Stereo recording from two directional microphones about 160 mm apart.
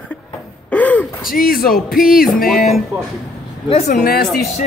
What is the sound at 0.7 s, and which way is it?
Gasp, 10° left (ahead or behind).